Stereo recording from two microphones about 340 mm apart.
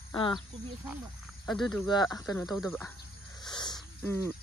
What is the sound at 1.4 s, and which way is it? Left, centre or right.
Speech, centre.